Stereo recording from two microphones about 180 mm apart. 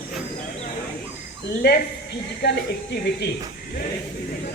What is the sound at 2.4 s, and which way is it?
Speech, 70° left (ahead or behind).